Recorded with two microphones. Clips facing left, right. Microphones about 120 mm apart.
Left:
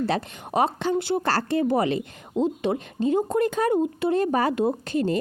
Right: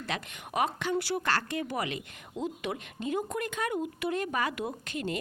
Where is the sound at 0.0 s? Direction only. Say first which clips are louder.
Left 11 dB; 35° left (ahead or behind).